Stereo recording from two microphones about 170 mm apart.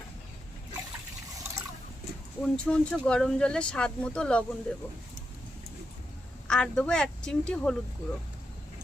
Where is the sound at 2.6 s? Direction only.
5° left (ahead or behind).